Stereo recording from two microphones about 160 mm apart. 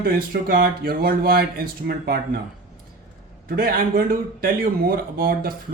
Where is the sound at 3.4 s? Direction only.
65° right (ahead or behind).